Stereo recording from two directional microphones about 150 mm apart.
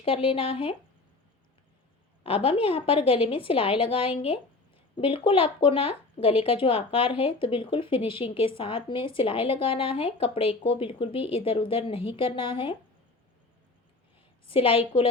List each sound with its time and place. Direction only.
0.0 s speech: 40° left (ahead or behind)
2.2 s speech: 40° left (ahead or behind)
14.4 s speech: 35° left (ahead or behind)